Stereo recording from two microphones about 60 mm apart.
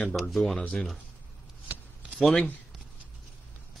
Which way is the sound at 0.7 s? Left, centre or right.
Centre.